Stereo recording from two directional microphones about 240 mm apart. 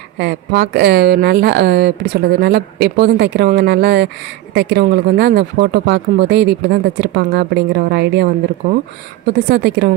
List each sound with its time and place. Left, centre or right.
0.2 s a woman's voice: right